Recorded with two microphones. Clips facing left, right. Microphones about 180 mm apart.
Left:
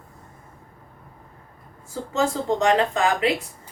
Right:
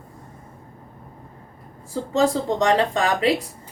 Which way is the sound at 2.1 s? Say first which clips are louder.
Right 3 dB; 35° right (ahead or behind).